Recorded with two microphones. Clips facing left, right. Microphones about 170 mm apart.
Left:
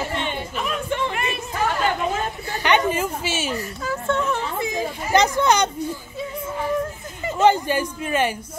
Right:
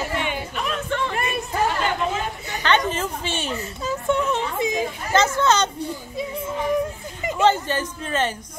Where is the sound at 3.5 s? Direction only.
25° right (ahead or behind).